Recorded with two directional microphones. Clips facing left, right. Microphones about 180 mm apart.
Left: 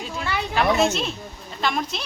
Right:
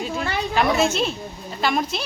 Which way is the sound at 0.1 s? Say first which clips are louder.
Right 3 dB; 50° right (ahead or behind).